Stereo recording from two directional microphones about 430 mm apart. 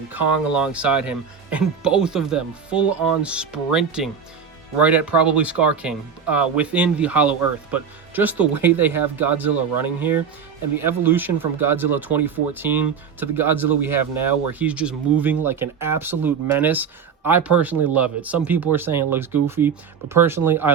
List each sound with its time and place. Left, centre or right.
0.1 s speech: centre